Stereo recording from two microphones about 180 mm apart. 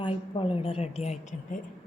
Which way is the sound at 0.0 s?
30° left (ahead or behind).